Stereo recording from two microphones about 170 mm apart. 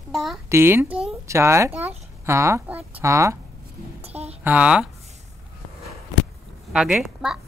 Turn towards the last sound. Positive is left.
turn(degrees=-5)  # may be behind; listen again after turning